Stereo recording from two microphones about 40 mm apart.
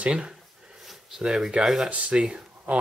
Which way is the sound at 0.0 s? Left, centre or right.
Right.